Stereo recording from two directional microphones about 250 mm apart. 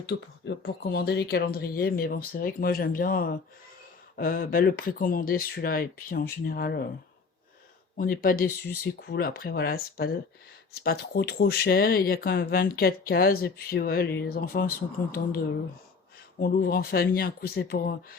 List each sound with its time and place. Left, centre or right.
0.0 s speech: left
7.9 s speech: left
16.4 s speech: left